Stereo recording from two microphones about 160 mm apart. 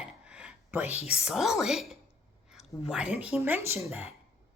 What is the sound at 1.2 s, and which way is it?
A woman's voice, 5° right (ahead or behind).